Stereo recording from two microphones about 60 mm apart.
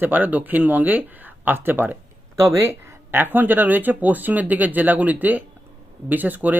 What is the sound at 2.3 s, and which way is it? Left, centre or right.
Speech, right.